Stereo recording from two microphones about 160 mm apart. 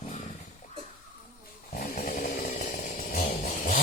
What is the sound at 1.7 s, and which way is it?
Chainsaw, 60° left (ahead or behind).